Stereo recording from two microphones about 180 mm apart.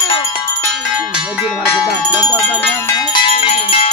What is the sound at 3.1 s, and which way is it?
Music, 30° left (ahead or behind).